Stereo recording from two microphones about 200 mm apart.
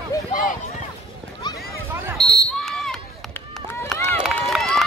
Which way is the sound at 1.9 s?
15° right (ahead or behind).